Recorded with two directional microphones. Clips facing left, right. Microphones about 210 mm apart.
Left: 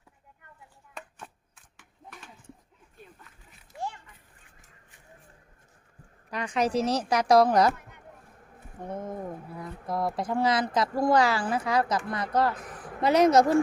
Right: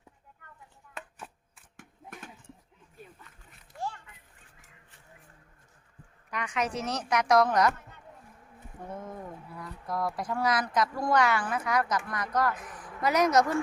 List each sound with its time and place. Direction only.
0.9 s chopping: 5° right (ahead or behind)
1.7 s a sound: 50° right (ahead or behind)
3.7 s children playing: 5° left (ahead or behind)
6.3 s speech: 35° left (ahead or behind)
8.9 s speech: 20° left (ahead or behind)